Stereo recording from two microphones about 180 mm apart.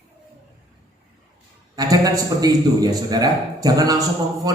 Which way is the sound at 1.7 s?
20° right (ahead or behind).